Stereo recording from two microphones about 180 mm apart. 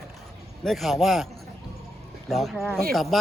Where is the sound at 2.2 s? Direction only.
Centre (ahead or behind).